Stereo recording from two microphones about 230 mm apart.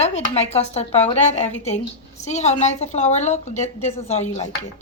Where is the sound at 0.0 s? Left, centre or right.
Left.